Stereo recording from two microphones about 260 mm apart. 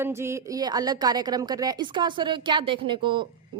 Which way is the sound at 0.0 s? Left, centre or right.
Centre.